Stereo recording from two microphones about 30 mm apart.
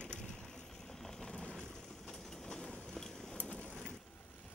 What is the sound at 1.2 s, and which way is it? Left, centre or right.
Vehicle, left.